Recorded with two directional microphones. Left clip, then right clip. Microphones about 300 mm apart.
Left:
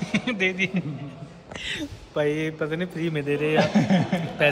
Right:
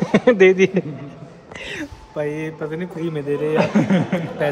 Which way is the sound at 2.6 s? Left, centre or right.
Left.